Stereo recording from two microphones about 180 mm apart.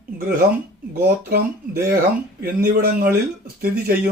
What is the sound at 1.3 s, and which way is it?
Speech, 55° right (ahead or behind).